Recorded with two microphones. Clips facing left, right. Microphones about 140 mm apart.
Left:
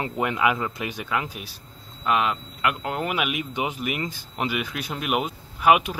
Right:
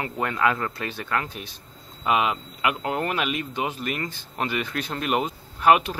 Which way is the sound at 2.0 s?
5° right (ahead or behind).